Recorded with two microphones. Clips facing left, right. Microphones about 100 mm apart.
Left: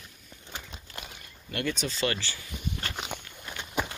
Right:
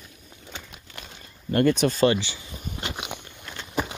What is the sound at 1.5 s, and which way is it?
Speech, 50° right (ahead or behind).